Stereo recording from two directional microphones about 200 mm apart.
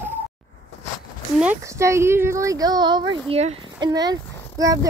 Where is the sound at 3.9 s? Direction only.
20° right (ahead or behind).